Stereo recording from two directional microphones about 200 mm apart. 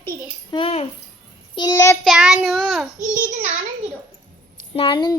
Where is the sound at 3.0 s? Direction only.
40° right (ahead or behind).